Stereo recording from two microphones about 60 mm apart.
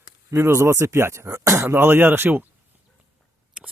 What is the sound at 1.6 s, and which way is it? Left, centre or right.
Speech, right.